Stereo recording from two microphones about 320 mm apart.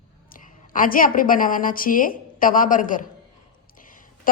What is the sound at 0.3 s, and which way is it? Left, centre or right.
A woman's voice, left.